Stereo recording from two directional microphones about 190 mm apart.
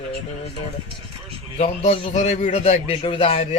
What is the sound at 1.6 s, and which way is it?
A man's voice, 30° left (ahead or behind).